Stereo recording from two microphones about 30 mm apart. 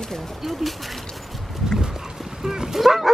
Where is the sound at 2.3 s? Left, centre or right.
Centre.